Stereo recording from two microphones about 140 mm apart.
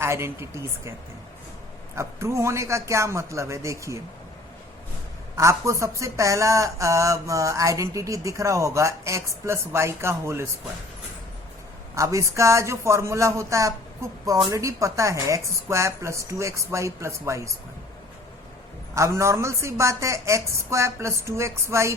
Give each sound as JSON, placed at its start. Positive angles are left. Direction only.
{"t": 0.0, "sound": "speech", "side_deg": -20}
{"t": 2.0, "sound": "speech", "side_deg": -20}
{"t": 5.4, "sound": "speech", "side_deg": -20}
{"t": 11.9, "sound": "speech", "side_deg": -20}
{"t": 18.9, "sound": "speech", "side_deg": -20}